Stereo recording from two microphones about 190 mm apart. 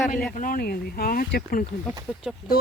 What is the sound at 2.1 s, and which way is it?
Speech, 5° left (ahead or behind).